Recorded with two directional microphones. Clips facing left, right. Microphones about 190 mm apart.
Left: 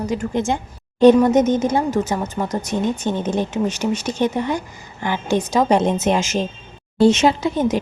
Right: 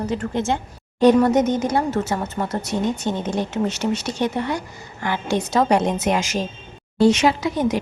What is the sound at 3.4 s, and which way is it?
A woman's voice, 15° left (ahead or behind).